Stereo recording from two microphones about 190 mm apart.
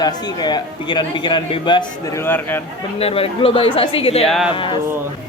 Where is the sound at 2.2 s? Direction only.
10° left (ahead or behind).